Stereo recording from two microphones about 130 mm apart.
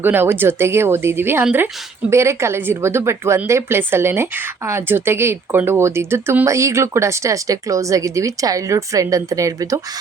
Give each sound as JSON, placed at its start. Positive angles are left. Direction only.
{"t": 0.0, "sound": "speech", "side_deg": -15}